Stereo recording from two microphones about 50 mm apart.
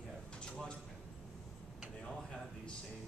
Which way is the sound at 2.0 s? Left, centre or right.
Centre.